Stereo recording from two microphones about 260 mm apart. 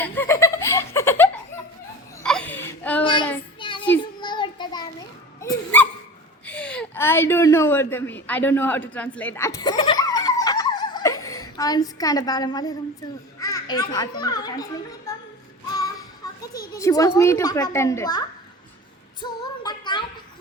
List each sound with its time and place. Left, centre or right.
0.0 s giggle: centre
2.2 s whimper: centre
3.0 s child singing: centre
4.0 s a sound: centre
5.4 s a sound: centre
13.4 s a child's voice: centre
15.8 s music: centre
16.7 s a woman's voice: centre
19.2 s female singing: centre